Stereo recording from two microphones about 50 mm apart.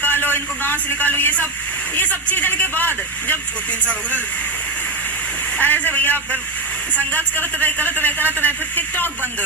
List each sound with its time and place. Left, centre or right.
0.0 s a sound: left
2.0 s a man's voice: left
5.5 s speech: left